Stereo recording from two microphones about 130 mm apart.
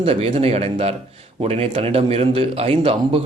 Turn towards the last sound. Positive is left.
turn(degrees=-45)  # may be behind; listen again after turning